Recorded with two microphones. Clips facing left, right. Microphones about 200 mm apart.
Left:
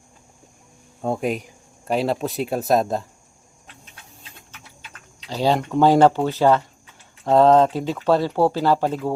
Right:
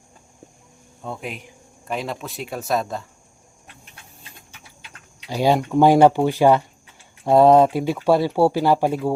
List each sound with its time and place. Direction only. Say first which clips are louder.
1.0 s speech: left 9 dB; 45° left (ahead or behind)
5.3 s speech: right 2 dB; 15° right (ahead or behind)